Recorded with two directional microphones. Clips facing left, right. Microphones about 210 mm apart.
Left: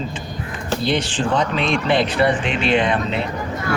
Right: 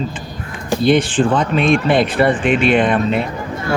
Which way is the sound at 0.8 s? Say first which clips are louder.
Right 8 dB; 55° right (ahead or behind).